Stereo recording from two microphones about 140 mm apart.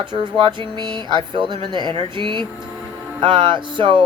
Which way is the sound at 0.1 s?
35° right (ahead or behind).